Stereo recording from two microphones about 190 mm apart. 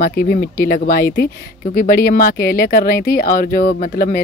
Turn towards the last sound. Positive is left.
turn(degrees=50)  # may be behind; listen again after turning